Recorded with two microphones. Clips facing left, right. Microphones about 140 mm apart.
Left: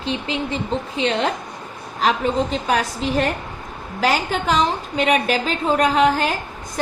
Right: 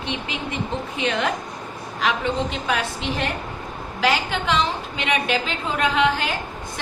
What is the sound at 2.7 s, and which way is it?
A woman's voice, 40° left (ahead or behind).